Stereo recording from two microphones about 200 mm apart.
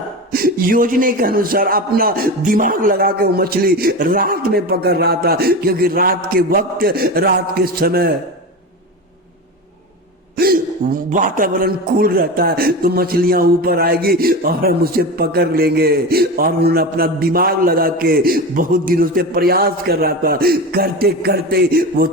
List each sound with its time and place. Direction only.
0.3 s a man's voice: 45° right (ahead or behind)
10.3 s a man's voice: 45° right (ahead or behind)